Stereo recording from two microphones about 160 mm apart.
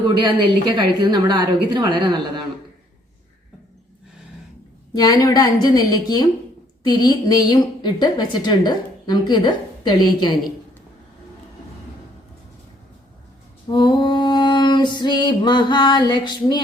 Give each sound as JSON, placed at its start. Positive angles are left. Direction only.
{"t": 0.1, "sound": "a woman's voice", "side_deg": -30}
{"t": 4.9, "sound": "a woman's voice", "side_deg": 25}
{"t": 13.7, "sound": "female singing", "side_deg": 30}